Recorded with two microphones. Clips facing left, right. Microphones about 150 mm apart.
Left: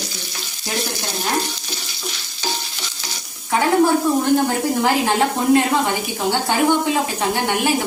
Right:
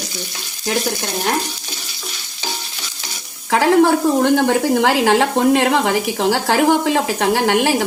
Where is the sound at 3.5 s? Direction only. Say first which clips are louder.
Right 3 dB; 80° right.